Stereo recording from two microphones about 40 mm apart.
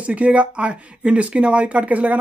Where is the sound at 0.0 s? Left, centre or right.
Right.